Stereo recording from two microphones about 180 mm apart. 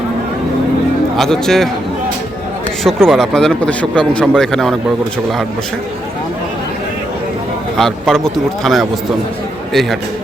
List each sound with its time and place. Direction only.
1.1 s speech: centre (ahead or behind)
2.8 s speech: centre (ahead or behind)
7.8 s speech: centre (ahead or behind)